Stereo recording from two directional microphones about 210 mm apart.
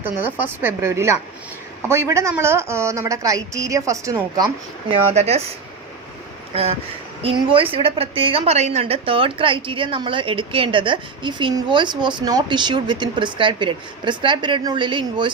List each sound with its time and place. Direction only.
0.0 s a woman's voice: 10° right (ahead or behind)
5.1 s speech: 30° right (ahead or behind)
6.5 s a woman's voice: 30° right (ahead or behind)